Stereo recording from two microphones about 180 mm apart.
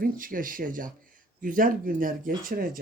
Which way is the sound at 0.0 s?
50° right (ahead or behind).